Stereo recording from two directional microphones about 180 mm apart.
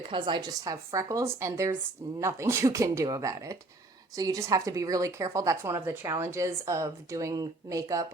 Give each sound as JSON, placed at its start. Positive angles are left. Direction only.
{"t": 0.1, "sound": "speech", "side_deg": -25}